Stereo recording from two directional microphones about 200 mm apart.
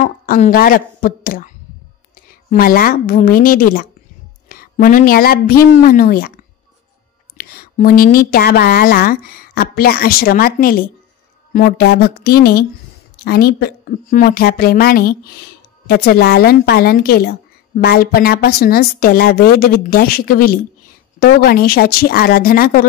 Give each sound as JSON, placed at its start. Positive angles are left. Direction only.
{"t": 0.0, "sound": "a woman's voice", "side_deg": 40}
{"t": 2.5, "sound": "a woman's voice", "side_deg": 45}
{"t": 7.3, "sound": "a woman's voice", "side_deg": 45}